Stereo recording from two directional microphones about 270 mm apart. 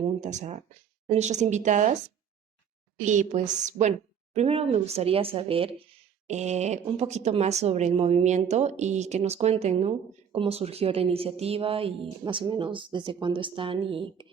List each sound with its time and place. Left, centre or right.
0.2 s speech: right
3.0 s speech: right